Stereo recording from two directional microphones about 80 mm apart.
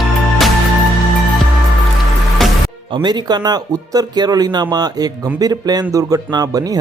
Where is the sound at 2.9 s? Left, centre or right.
Right.